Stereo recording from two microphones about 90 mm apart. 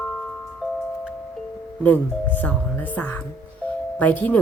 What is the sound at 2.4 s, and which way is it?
Speech, 20° left (ahead or behind).